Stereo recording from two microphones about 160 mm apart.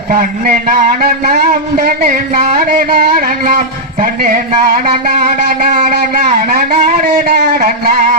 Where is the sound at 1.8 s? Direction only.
60° right (ahead or behind).